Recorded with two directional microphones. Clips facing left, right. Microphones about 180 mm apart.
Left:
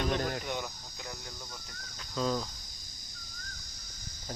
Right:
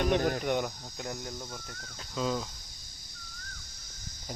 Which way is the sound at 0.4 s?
55° right (ahead or behind).